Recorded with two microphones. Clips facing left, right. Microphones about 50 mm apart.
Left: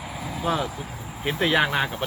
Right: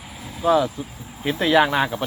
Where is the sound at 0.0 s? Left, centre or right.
Left.